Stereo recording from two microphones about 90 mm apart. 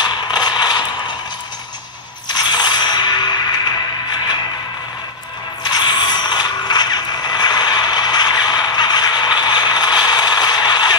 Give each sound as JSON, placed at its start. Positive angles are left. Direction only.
{"t": 0.0, "sound": "mechanisms", "side_deg": 55}
{"t": 2.2, "sound": "mechanisms", "side_deg": 55}
{"t": 5.6, "sound": "mechanisms", "side_deg": 55}
{"t": 9.4, "sound": "scrape", "side_deg": 55}
{"t": 10.0, "sound": "a sound", "side_deg": 50}